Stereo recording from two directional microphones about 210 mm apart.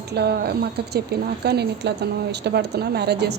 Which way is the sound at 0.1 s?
50° right (ahead or behind).